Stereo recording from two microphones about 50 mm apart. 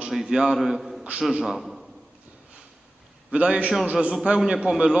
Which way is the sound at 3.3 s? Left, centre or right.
Right.